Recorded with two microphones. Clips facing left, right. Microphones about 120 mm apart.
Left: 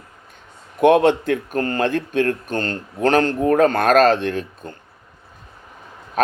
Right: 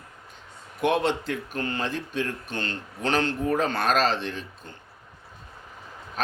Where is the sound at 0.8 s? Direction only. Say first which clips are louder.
Left 10 dB; 55° left (ahead or behind).